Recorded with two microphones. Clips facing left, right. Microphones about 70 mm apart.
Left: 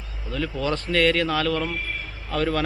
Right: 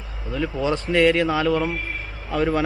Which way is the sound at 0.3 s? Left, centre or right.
Centre.